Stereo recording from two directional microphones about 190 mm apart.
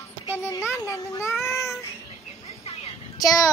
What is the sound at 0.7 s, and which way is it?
Speech, 15° left (ahead or behind).